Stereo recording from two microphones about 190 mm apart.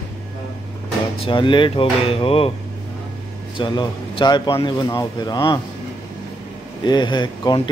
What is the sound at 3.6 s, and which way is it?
Speech, 25° left (ahead or behind).